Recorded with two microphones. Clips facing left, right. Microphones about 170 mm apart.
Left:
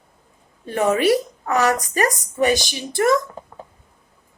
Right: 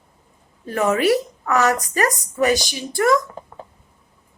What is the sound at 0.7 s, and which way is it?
Speech, 25° left (ahead or behind).